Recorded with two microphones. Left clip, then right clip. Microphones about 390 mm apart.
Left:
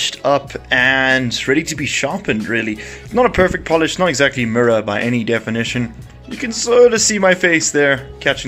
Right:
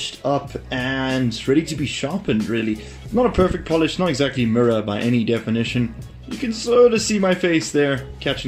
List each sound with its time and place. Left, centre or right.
0.0 s speech: left